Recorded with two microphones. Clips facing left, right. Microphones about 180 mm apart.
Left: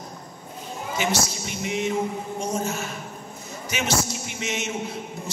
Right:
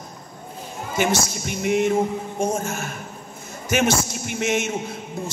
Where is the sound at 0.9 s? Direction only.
50° right (ahead or behind).